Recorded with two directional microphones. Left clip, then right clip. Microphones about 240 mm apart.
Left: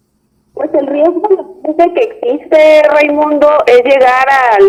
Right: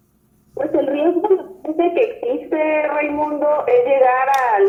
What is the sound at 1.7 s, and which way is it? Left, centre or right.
A woman's voice, left.